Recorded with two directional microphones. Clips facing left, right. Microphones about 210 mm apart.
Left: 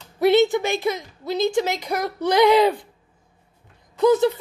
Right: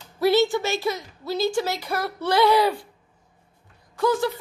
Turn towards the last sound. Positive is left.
turn(degrees=20)  # may be behind; listen again after turning